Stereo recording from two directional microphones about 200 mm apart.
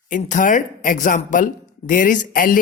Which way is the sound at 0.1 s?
40° left (ahead or behind).